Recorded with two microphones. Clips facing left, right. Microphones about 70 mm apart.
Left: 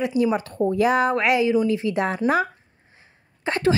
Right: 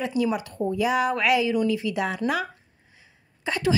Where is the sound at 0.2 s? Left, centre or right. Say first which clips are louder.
Left 4 dB; left.